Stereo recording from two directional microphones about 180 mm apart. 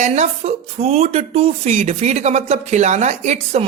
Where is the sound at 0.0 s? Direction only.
40° right (ahead or behind).